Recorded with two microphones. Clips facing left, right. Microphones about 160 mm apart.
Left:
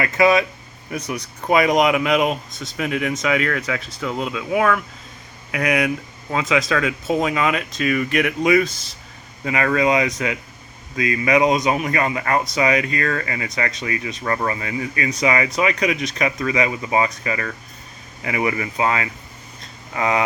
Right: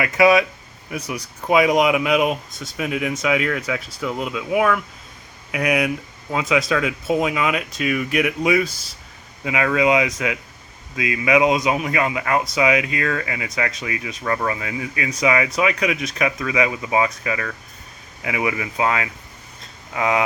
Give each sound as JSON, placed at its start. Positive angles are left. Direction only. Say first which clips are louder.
{"t": 0.0, "sound": "speech", "louder": "right 1 dB", "side_deg": -10}